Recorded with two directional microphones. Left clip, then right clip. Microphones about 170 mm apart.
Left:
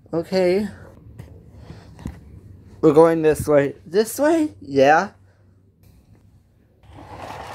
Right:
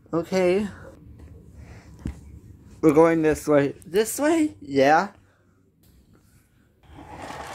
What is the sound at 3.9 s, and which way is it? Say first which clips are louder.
A woman's voice: left 4 dB; 25° left (ahead or behind).